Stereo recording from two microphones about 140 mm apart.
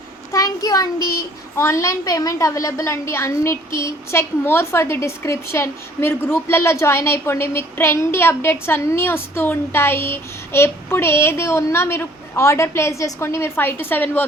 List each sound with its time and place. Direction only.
0.3 s a child's voice: 25° left (ahead or behind)